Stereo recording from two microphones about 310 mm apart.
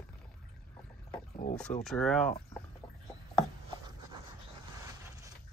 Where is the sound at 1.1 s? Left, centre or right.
Left.